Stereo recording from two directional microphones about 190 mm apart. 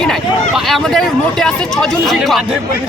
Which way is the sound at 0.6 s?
Centre (ahead or behind).